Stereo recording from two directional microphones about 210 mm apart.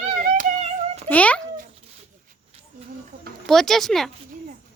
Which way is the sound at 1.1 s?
5° left (ahead or behind).